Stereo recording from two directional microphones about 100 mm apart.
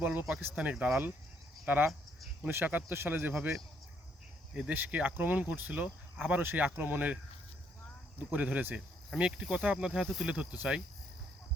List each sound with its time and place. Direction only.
0.0 s speech: 10° right (ahead or behind)
4.5 s speech: 15° right (ahead or behind)
8.3 s speech: 15° right (ahead or behind)